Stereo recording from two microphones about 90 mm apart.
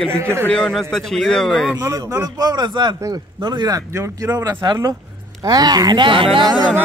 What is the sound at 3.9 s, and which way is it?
Speech, 35° right (ahead or behind).